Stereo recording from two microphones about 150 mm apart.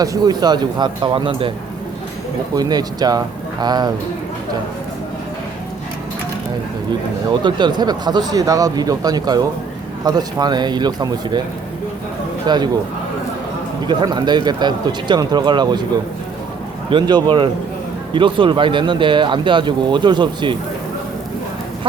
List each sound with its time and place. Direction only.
0.0 s speech: 25° right (ahead or behind)
2.6 s speech: 25° right (ahead or behind)
7.4 s speech: 30° right (ahead or behind)
12.5 s speech: 30° right (ahead or behind)
13.8 s speech: 30° right (ahead or behind)
16.9 s speech: 30° right (ahead or behind)